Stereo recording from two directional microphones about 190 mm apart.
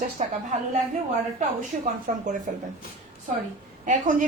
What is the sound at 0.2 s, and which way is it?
Speech, 35° right (ahead or behind).